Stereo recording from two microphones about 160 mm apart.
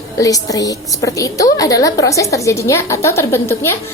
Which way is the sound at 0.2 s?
20° left (ahead or behind).